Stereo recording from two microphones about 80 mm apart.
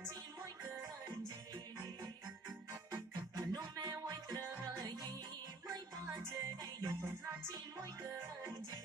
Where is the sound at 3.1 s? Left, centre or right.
Right.